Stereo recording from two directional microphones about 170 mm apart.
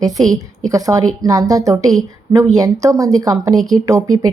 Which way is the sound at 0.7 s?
20° right (ahead or behind).